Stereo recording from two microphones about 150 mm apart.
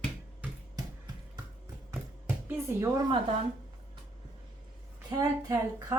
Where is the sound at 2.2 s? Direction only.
15° right (ahead or behind).